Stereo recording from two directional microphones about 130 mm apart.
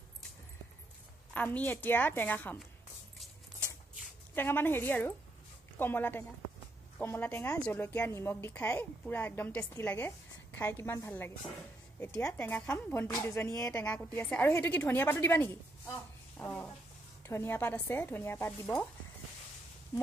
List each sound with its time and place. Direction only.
1.3 s a woman's voice: 10° left (ahead or behind)
3.2 s a sound: centre (ahead or behind)
4.4 s a woman's voice: 15° left (ahead or behind)